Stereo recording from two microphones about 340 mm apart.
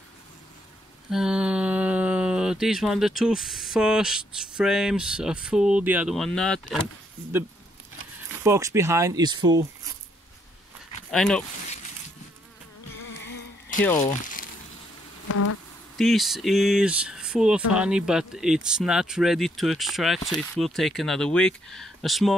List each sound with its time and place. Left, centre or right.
1.1 s speech: centre
8.5 s speech: centre
11.1 s speech: centre
13.8 s speech: centre
14.2 s a sound: left
15.2 s insect: left
16.0 s speech: centre